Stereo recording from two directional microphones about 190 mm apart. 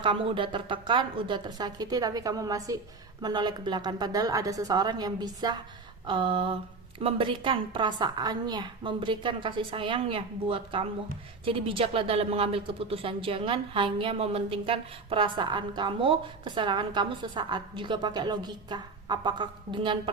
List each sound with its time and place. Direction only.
0.0 s speech: 25° right (ahead or behind)